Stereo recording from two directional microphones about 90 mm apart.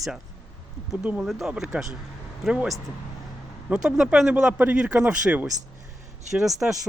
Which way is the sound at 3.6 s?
5° right (ahead or behind).